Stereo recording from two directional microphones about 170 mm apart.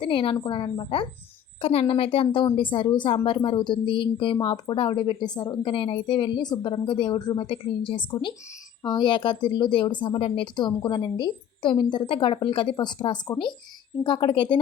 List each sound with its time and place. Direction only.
0.0 s a woman's voice: 30° left (ahead or behind)